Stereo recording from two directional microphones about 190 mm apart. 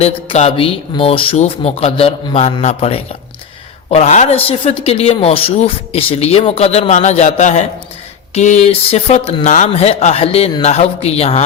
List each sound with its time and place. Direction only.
0.0 s speech: 35° left (ahead or behind)